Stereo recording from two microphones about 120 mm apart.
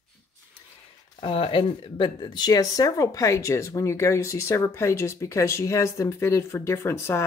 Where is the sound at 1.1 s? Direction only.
50° left (ahead or behind).